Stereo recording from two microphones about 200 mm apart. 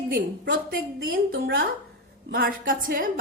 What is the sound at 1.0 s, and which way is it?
Speech, 50° right (ahead or behind).